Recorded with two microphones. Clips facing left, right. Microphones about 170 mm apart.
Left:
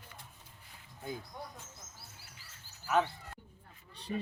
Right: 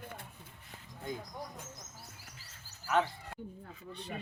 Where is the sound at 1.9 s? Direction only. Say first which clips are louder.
Right 3 dB; 40° right (ahead or behind).